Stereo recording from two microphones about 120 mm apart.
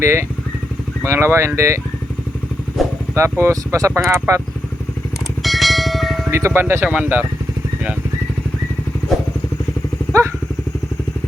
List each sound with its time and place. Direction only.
0.0 s speech: 20° right (ahead or behind)
3.2 s speech: 20° right (ahead or behind)
5.4 s bell: centre (ahead or behind)
6.3 s speech: 20° right (ahead or behind)
10.1 s vehicle: 25° right (ahead or behind)